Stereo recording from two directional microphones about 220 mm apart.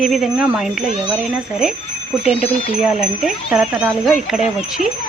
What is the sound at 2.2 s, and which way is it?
Speech, 25° left (ahead or behind).